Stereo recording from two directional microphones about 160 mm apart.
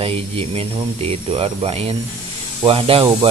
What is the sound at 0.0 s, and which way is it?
Speech, 35° right (ahead or behind).